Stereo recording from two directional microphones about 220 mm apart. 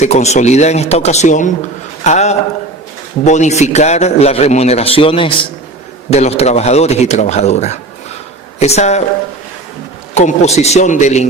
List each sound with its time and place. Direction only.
0.0 s a man's voice: 30° left (ahead or behind)
10.2 s speech: 30° left (ahead or behind)